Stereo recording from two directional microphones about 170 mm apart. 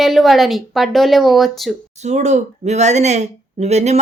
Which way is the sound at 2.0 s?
40° right (ahead or behind).